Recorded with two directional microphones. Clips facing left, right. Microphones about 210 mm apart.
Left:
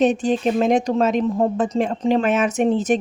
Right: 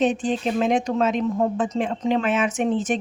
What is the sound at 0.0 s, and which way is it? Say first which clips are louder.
Speech: left 4 dB; 40° left (ahead or behind).